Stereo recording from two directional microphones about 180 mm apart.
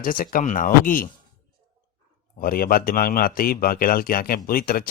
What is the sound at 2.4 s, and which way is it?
Speech, 55° left (ahead or behind).